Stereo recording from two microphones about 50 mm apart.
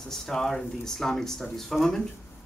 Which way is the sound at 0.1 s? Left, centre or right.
Centre.